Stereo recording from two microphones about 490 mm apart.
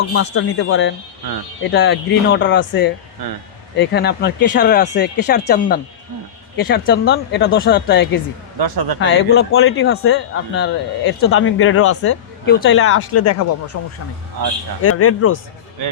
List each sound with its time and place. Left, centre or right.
0.1 s speech: left
8.5 s speech: right
9.0 s speech: left
14.8 s speech: left